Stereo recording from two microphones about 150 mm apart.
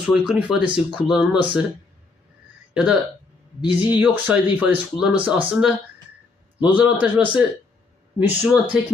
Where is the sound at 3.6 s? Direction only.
30° left (ahead or behind).